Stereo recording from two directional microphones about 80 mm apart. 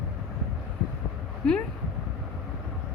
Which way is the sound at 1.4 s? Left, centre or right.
Centre.